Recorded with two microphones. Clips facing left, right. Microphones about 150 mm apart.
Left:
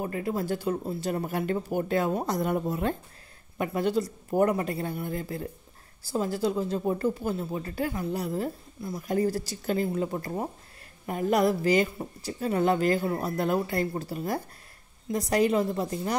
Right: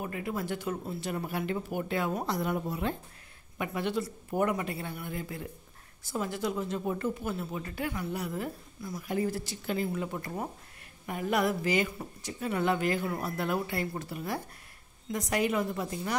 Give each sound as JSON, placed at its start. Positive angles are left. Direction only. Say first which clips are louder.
{"t": 0.0, "sound": "a woman's voice", "louder": "left 5 dB", "side_deg": 35}